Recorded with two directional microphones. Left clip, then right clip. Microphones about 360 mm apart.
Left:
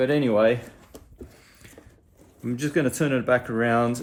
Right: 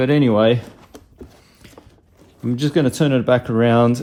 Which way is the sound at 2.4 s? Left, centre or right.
Centre.